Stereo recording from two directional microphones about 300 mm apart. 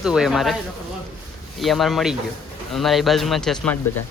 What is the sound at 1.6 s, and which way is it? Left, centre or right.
Speech, centre.